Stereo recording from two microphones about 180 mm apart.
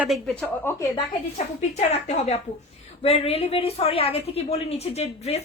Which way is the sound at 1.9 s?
40° left (ahead or behind).